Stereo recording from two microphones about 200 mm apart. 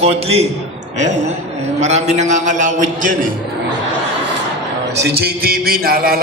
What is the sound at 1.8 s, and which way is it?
A man's voice, 35° right (ahead or behind).